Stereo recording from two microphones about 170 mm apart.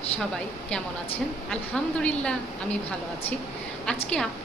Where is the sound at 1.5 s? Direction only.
5° left (ahead or behind).